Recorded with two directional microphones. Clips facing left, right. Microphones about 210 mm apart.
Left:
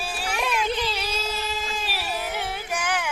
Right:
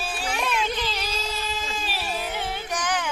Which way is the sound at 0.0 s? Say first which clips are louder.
Even; 10° left (ahead or behind).